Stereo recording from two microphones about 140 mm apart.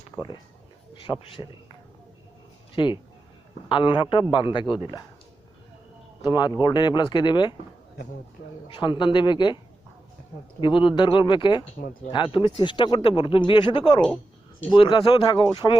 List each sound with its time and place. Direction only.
1.0 s speech: 30° left (ahead or behind)
2.8 s speech: 35° left (ahead or behind)
6.2 s speech: 30° left (ahead or behind)
8.7 s speech: 35° left (ahead or behind)
10.6 s speech: 35° left (ahead or behind)